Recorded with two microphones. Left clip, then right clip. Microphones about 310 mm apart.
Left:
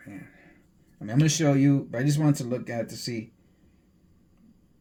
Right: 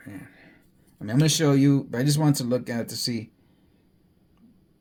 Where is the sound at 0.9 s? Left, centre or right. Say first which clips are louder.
Right 2 dB; right.